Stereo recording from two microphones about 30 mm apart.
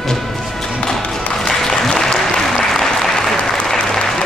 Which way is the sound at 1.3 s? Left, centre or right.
Centre.